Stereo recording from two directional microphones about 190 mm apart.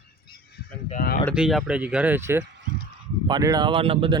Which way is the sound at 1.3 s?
5° right (ahead or behind).